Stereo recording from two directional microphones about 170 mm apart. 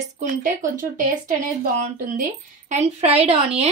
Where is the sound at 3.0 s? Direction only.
40° right (ahead or behind).